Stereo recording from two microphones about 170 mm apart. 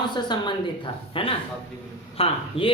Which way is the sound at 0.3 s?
25° left (ahead or behind).